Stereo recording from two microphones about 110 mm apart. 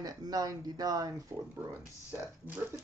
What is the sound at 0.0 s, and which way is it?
Speech, 35° right (ahead or behind).